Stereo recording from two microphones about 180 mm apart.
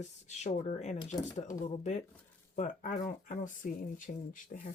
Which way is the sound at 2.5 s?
45° left (ahead or behind).